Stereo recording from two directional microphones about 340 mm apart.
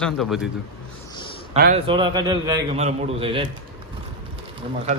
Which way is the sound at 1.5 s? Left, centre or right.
Right.